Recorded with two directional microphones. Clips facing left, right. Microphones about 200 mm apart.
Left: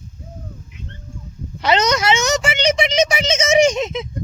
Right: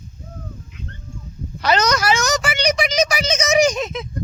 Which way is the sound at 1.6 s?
25° left (ahead or behind).